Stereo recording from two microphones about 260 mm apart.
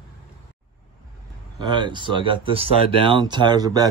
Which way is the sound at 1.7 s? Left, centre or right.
Centre.